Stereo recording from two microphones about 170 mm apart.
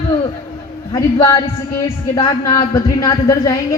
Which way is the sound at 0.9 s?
20° left (ahead or behind).